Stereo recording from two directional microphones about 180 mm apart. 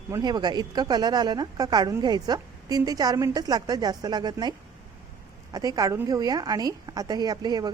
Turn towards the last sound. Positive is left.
turn(degrees=-20)  # may be behind; listen again after turning